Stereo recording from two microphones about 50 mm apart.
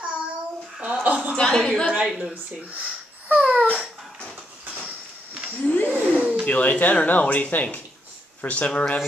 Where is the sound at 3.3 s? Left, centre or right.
Right.